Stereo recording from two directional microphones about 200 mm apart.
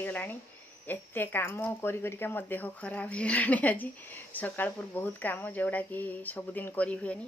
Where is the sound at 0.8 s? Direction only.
10° left (ahead or behind).